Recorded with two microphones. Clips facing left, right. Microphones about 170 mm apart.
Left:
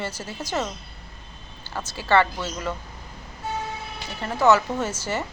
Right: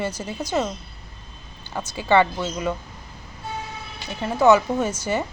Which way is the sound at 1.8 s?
15° right (ahead or behind).